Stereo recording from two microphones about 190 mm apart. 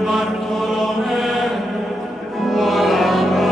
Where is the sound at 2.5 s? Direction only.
Centre (ahead or behind).